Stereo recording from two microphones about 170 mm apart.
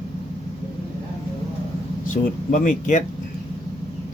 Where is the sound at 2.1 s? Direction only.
50° left (ahead or behind).